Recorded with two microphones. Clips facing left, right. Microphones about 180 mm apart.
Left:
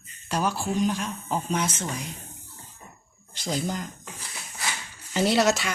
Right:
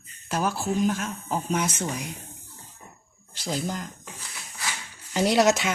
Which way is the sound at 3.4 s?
5° right (ahead or behind).